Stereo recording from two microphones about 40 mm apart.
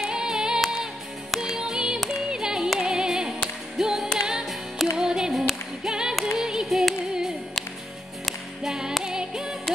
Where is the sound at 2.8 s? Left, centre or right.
Centre.